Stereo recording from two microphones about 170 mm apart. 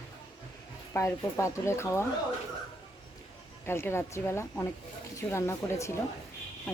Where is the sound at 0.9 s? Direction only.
15° left (ahead or behind).